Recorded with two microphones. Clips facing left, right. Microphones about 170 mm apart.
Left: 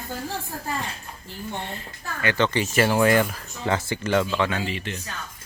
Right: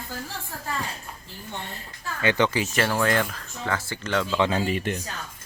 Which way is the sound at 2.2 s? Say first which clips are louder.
Right 1 dB; 20° right (ahead or behind).